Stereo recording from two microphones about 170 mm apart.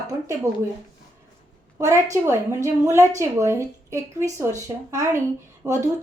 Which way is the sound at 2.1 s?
15° right (ahead or behind).